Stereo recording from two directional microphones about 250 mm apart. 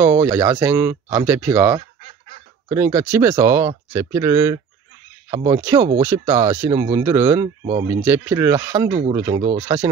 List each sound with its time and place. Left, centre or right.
0.0 s speech: centre
5.4 s speech: right
5.9 s speech: centre